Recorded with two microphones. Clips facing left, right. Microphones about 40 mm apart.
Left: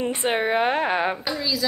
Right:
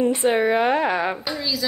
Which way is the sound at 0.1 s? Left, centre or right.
Left.